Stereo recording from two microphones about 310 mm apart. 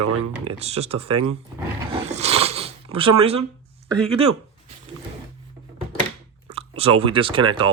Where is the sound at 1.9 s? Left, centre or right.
Right.